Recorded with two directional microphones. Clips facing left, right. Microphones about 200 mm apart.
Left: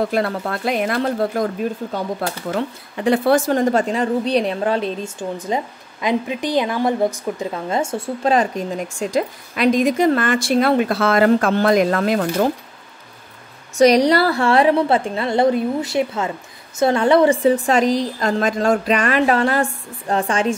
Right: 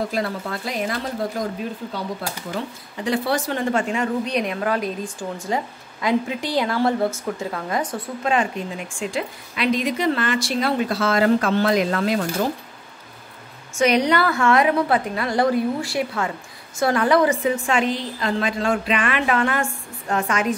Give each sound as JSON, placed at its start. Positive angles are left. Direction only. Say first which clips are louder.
{"t": 0.1, "sound": "a woman's voice", "louder": "left 5 dB", "side_deg": 60}
{"t": 13.7, "sound": "a woman's voice", "louder": "left 5 dB", "side_deg": 35}